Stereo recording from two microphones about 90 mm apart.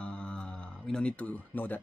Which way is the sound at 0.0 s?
10° left (ahead or behind).